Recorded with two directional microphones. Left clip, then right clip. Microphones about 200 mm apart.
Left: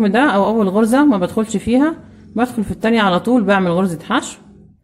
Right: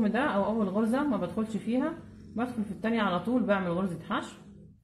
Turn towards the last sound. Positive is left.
turn(degrees=50)  # may be behind; listen again after turning